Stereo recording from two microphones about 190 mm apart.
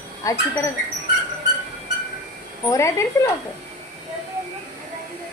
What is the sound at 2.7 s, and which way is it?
Speech, 15° left (ahead or behind).